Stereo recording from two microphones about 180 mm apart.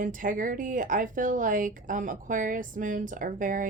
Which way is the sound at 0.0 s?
50° right (ahead or behind).